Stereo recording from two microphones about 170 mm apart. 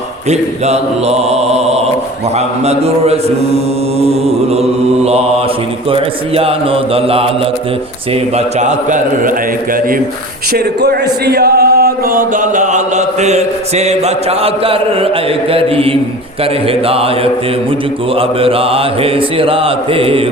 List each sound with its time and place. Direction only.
0.3 s mantra: 40° right (ahead or behind)
8.5 s a man's voice: 45° right (ahead or behind)
10.5 s speech: 70° right (ahead or behind); by 15.1 s 35° right (ahead or behind)
15.5 s mantra: 35° right (ahead or behind)
18.2 s mantra: 35° right (ahead or behind)